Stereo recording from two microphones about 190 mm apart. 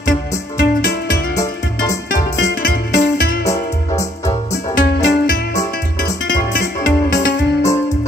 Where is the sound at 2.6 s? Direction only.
50° left (ahead or behind).